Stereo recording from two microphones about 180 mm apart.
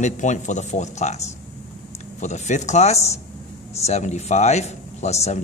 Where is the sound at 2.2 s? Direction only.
40° left (ahead or behind).